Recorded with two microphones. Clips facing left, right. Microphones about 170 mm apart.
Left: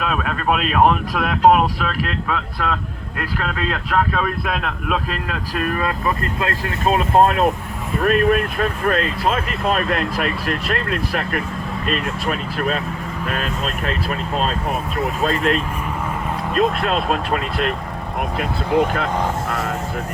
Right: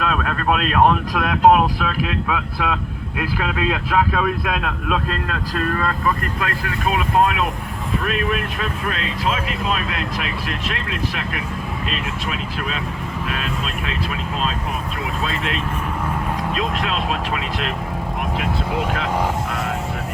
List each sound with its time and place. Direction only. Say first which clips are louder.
0.0 s speech: even; 5° left (ahead or behind)
6.4 s speech: left 4 dB; 30° left (ahead or behind)
7.2 s speech: left 5 dB; 40° left (ahead or behind)
16.6 s speech: left 5 dB; 45° left (ahead or behind)
18.9 s speech: even; 50° left (ahead or behind)